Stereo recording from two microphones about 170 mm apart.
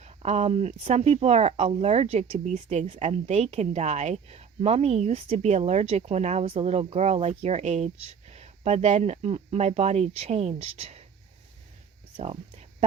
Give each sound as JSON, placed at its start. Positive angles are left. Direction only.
{"t": 0.0, "sound": "a woman's voice", "side_deg": -40}
{"t": 12.1, "sound": "speech", "side_deg": -40}